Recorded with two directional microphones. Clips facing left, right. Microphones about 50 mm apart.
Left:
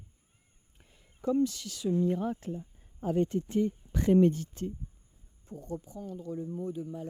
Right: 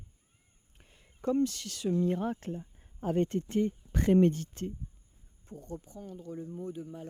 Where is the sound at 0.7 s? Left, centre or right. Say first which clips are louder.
Right 1 dB; right.